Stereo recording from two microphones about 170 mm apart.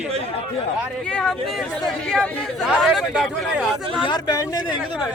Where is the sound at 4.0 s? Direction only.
25° left (ahead or behind).